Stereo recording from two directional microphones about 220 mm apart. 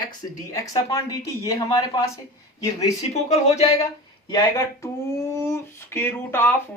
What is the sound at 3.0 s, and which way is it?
Speech, 30° left (ahead or behind).